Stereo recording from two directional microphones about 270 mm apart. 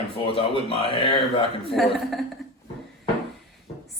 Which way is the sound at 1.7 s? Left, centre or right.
Centre.